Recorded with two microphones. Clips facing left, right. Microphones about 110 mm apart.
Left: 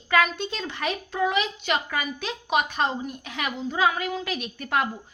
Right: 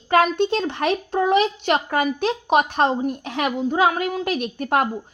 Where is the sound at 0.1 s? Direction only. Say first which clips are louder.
Right 6 dB; 55° right (ahead or behind).